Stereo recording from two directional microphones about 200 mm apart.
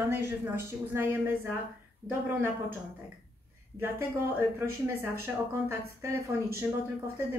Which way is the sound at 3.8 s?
10° right (ahead or behind).